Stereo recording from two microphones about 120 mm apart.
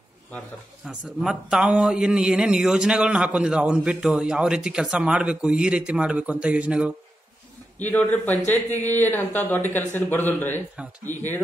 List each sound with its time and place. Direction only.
0.8 s a man's voice: 5° right (ahead or behind)
7.8 s a man's voice: 15° left (ahead or behind)
11.1 s speech: 85° left